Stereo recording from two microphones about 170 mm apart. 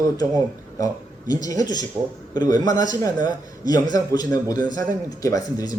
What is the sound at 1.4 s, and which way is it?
A man's voice, 20° left (ahead or behind).